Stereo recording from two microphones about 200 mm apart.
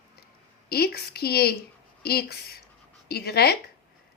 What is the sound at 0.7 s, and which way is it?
A woman's voice, 50° left (ahead or behind).